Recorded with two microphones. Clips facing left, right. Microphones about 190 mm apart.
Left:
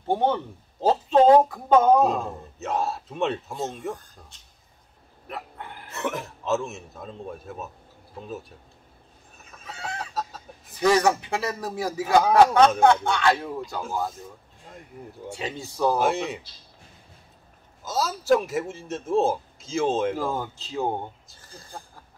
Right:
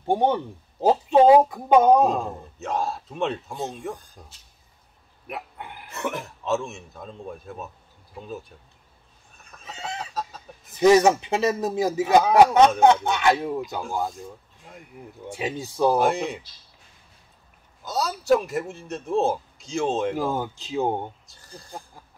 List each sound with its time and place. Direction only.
0.0 s speech: 15° right (ahead or behind)
2.0 s a man's voice: centre (ahead or behind)
5.3 s dog: 15° right (ahead or behind)
5.9 s a man's voice: centre (ahead or behind)
9.7 s chicken: 20° right (ahead or behind)
10.8 s speech: 20° right (ahead or behind)
15.2 s speech: 15° right (ahead or behind)
16.0 s a man's voice: centre (ahead or behind)
17.8 s a man's voice: centre (ahead or behind)
20.3 s speech: 15° right (ahead or behind)
21.3 s speech: centre (ahead or behind)